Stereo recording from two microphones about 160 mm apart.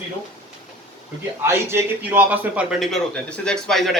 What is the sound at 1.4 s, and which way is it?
A man's voice, 15° right (ahead or behind).